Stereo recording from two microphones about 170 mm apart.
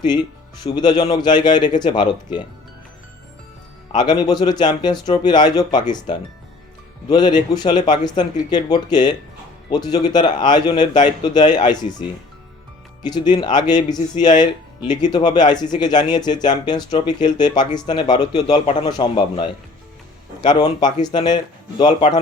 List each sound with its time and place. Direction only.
0.6 s speech: 25° left (ahead or behind)
3.9 s speech: 25° left (ahead or behind)